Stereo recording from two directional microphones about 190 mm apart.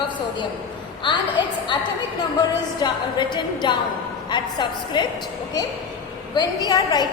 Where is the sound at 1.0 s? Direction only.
25° left (ahead or behind).